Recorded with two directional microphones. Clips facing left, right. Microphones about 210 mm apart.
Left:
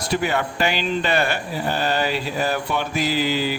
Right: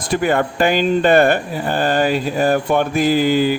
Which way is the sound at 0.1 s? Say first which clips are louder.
Right 6 dB; 50° right (ahead or behind).